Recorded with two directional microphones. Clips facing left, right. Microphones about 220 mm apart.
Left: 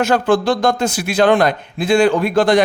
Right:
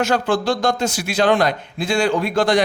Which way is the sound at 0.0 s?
55° left (ahead or behind).